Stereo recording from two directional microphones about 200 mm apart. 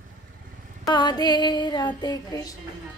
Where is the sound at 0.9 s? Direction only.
20° left (ahead or behind).